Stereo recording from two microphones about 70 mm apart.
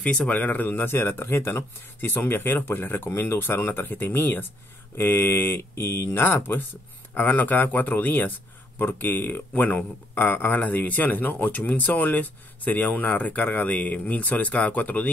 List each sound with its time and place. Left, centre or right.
0.0 s speech: centre